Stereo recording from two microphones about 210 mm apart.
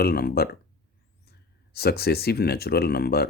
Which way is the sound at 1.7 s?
50° left (ahead or behind).